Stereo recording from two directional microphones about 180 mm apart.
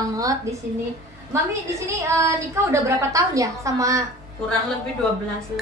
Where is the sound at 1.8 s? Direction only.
15° right (ahead or behind).